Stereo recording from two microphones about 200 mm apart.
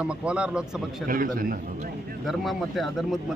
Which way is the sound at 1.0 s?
45° right (ahead or behind).